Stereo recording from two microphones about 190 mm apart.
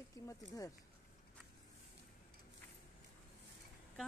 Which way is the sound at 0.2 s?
20° left (ahead or behind).